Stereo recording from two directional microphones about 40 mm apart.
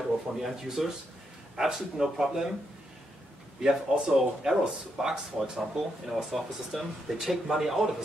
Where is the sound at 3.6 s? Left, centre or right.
Centre.